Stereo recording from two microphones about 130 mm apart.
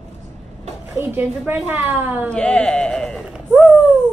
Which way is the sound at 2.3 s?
5° left (ahead or behind).